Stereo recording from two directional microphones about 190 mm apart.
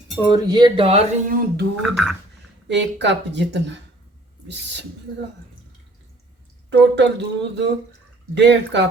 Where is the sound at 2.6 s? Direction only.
70° right (ahead or behind).